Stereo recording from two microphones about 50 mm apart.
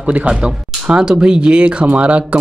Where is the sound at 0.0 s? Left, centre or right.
Right.